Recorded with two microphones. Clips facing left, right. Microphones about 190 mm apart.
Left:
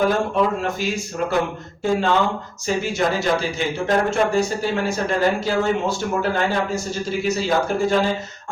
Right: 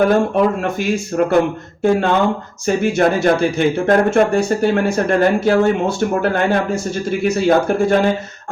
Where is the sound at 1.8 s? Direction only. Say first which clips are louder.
Right 5 dB; 55° right (ahead or behind).